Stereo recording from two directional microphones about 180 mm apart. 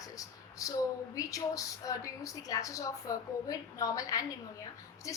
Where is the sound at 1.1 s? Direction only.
20° left (ahead or behind).